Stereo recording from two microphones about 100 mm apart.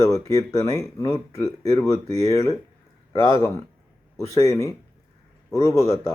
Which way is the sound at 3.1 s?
45° left (ahead or behind).